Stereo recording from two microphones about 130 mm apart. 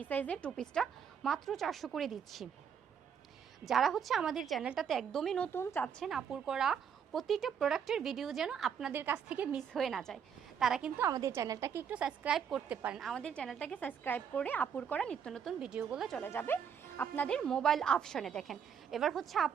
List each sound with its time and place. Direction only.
0.0 s a woman's voice: 15° left (ahead or behind)
3.7 s a woman's voice: centre (ahead or behind)
5.5 s a woman's voice: 15° left (ahead or behind)
6.0 s a woman's voice: centre (ahead or behind)
8.9 s a woman's voice: 15° right (ahead or behind)
9.7 s a woman's voice: centre (ahead or behind)
11.0 s a woman's voice: 25° right (ahead or behind)
13.0 s a woman's voice: 5° left (ahead or behind)
15.5 s a woman's voice: 5° right (ahead or behind)
16.2 s a woman's voice: 15° left (ahead or behind); by 19.5 s centre (ahead or behind)